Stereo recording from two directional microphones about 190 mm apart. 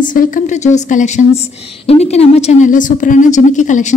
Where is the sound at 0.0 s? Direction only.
45° left (ahead or behind).